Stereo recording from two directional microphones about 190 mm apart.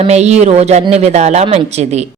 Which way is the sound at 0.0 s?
35° right (ahead or behind).